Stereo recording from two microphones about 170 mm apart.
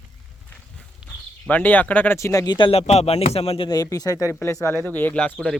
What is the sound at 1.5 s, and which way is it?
Speech, 10° left (ahead or behind).